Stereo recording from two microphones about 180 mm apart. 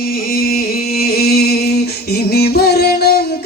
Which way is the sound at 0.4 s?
55° left (ahead or behind).